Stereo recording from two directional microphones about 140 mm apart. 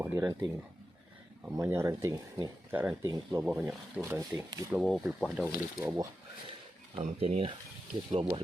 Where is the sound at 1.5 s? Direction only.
20° right (ahead or behind).